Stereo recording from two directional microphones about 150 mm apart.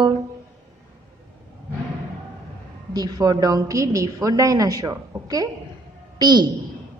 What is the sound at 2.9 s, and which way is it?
A woman's voice, 25° right (ahead or behind).